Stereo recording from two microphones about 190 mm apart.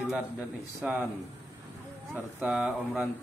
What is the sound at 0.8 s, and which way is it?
Speech, 5° right (ahead or behind).